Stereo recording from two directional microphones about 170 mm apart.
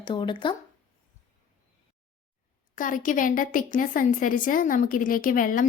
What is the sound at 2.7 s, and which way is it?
A woman's voice, 50° left (ahead or behind).